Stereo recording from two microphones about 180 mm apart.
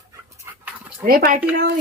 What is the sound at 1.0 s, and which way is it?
Speech, 55° right (ahead or behind).